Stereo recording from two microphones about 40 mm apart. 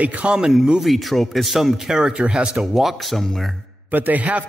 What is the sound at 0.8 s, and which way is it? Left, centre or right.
Speech, centre.